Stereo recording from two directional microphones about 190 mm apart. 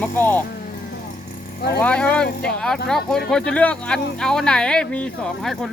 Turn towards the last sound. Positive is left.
turn(degrees=5)  # may be behind; listen again after turning